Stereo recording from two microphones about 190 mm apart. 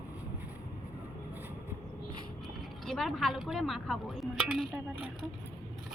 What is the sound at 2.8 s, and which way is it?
Speech, centre (ahead or behind).